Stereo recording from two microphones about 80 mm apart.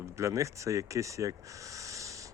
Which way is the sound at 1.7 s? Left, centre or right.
Right.